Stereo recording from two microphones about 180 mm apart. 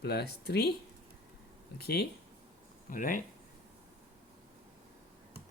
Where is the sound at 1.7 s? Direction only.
60° left (ahead or behind).